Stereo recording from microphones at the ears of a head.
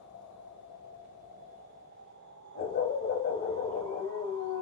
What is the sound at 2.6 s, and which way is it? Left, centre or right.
Howl, left.